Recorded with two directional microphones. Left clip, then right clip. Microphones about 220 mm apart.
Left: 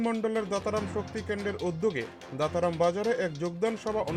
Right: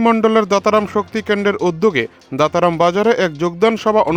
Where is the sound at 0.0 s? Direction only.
45° right (ahead or behind).